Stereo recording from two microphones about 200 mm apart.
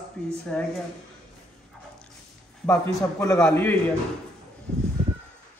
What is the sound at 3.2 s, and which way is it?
Speech, 15° left (ahead or behind).